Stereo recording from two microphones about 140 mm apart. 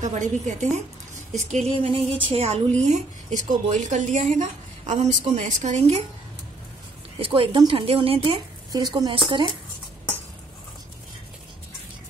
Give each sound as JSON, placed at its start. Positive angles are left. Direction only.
{"t": 0.0, "sound": "a woman's voice", "side_deg": -60}
{"t": 7.2, "sound": "a woman's voice", "side_deg": -40}